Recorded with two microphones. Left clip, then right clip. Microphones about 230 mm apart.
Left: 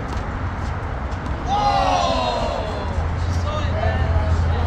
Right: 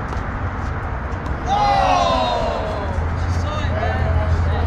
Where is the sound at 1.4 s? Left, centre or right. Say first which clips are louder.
Right 2 dB; right.